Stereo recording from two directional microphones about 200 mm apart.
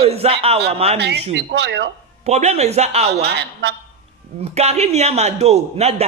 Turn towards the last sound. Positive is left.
turn(degrees=-30)  # may be behind; listen again after turning